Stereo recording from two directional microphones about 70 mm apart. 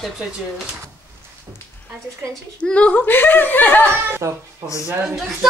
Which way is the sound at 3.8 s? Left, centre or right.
Right.